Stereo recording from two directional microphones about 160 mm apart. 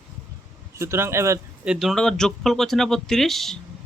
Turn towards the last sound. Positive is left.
turn(degrees=0)  # may be behind; listen again after turning